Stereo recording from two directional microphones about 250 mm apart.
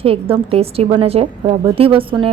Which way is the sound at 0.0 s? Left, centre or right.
Right.